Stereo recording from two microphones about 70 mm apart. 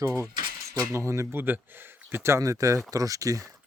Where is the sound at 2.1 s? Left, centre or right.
Right.